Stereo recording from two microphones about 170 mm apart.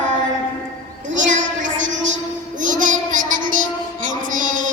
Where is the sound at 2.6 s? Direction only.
50° right (ahead or behind).